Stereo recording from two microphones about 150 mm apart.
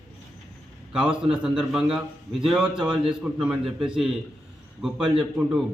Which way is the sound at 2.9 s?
35° right (ahead or behind).